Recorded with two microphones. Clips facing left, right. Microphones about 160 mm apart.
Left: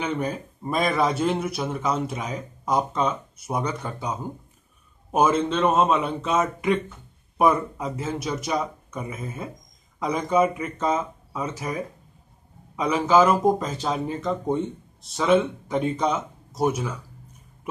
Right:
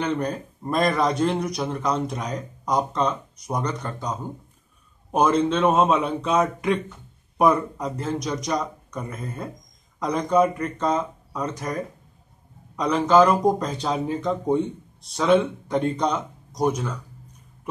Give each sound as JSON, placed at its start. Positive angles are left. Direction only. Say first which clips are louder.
{"t": 0.0, "sound": "a man's voice", "louder": "right 2 dB", "side_deg": 5}